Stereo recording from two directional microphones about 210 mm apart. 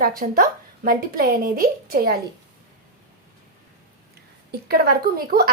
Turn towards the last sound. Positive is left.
turn(degrees=-45)  # may be behind; listen again after turning